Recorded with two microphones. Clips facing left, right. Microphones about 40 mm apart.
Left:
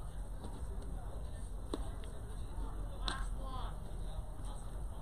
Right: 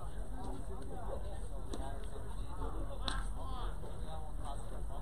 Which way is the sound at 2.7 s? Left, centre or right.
Centre.